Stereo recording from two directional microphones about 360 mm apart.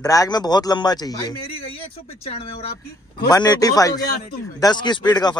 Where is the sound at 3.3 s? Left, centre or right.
Centre.